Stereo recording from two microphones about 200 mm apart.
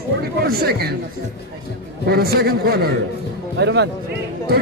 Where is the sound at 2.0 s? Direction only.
50° right (ahead or behind).